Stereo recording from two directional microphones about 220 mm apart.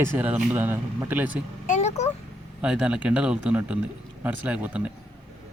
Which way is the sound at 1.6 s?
30° left (ahead or behind).